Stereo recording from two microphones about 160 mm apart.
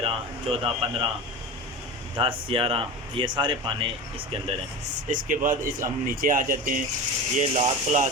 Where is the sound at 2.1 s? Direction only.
35° right (ahead or behind).